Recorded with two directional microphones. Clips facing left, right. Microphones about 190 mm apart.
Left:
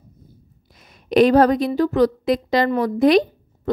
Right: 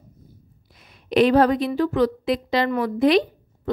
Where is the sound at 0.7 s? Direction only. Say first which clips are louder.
Left 3 dB; 40° left (ahead or behind).